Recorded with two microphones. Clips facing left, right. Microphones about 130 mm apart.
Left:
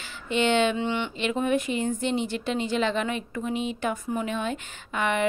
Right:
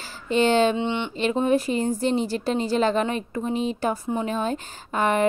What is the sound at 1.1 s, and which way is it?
Speech, 35° right (ahead or behind).